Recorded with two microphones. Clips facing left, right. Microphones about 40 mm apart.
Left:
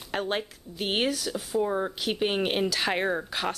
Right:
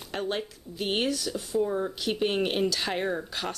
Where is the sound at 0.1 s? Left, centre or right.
Centre.